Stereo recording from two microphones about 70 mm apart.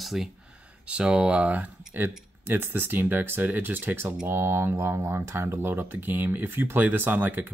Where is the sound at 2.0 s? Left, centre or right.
Right.